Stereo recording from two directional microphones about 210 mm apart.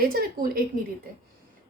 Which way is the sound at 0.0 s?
45° right (ahead or behind).